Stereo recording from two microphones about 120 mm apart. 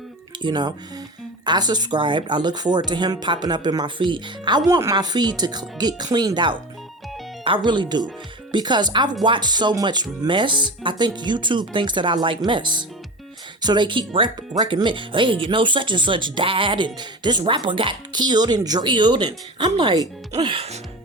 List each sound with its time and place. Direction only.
0.4 s speech: 40° right (ahead or behind)
20.4 s music: 45° right (ahead or behind)